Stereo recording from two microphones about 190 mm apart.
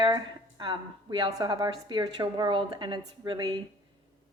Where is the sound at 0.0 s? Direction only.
25° right (ahead or behind).